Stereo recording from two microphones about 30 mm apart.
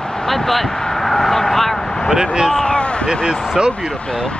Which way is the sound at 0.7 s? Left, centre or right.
Centre.